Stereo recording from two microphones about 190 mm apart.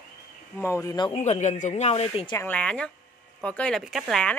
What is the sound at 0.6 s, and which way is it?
Speech, 15° left (ahead or behind).